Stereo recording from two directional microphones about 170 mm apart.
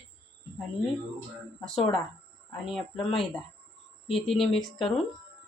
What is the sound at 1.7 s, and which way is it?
Speech, 35° left (ahead or behind).